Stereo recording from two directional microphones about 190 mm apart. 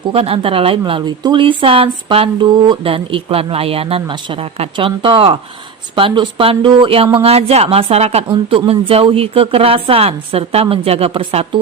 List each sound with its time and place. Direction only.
0.1 s speech: 30° right (ahead or behind)